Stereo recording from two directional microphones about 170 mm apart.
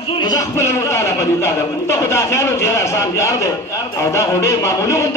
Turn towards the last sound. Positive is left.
turn(degrees=15)  # may be behind; listen again after turning